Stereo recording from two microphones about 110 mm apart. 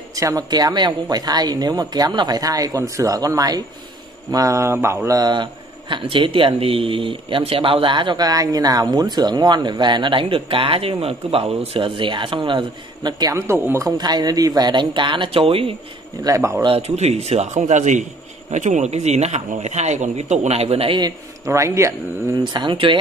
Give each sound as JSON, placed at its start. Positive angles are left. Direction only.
{"t": 0.1, "sound": "a man's voice", "side_deg": -30}
{"t": 13.3, "sound": "speech", "side_deg": -25}
{"t": 13.9, "sound": "a man's voice", "side_deg": -40}
{"t": 16.3, "sound": "speech", "side_deg": -30}
{"t": 16.6, "sound": "a man's voice", "side_deg": -65}
{"t": 21.5, "sound": "speech", "side_deg": -25}
{"t": 22.4, "sound": "a man's voice", "side_deg": -45}